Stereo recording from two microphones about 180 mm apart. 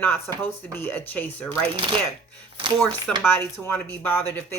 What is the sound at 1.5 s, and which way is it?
Speech, 25° right (ahead or behind).